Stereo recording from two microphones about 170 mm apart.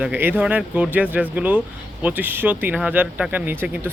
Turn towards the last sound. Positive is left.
turn(degrees=-10)  # may be behind; listen again after turning